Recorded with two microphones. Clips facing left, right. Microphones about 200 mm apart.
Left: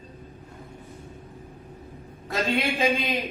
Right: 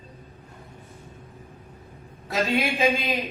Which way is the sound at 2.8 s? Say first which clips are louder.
Right 1 dB; centre (ahead or behind).